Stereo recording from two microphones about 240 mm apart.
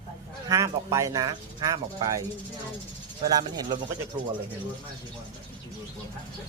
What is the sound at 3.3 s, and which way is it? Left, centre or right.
Speech, centre.